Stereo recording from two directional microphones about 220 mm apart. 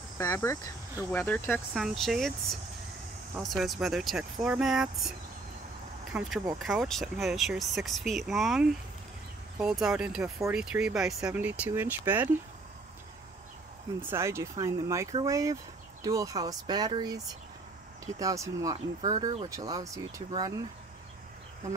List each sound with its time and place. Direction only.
0.2 s speech: 10° left (ahead or behind)
3.4 s speech: centre (ahead or behind)
6.1 s speech: centre (ahead or behind)
14.1 s speech: 10° right (ahead or behind)